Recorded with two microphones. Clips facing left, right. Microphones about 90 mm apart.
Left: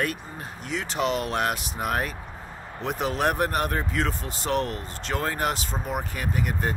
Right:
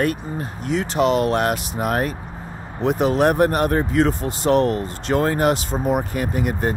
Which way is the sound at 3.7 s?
30° right (ahead or behind).